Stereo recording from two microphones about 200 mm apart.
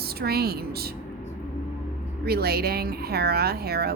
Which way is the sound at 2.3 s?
50° right (ahead or behind).